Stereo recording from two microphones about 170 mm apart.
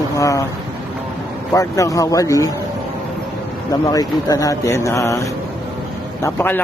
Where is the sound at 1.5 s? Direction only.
20° left (ahead or behind).